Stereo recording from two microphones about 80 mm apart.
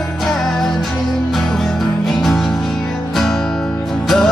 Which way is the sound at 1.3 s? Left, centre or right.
Centre.